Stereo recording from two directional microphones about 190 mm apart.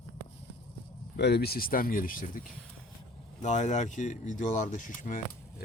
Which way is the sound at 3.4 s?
40° left (ahead or behind).